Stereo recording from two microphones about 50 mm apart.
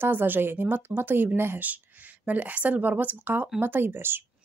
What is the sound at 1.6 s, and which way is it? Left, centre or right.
A woman's voice, right.